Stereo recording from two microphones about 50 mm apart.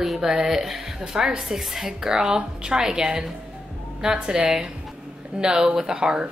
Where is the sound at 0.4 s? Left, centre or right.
Centre.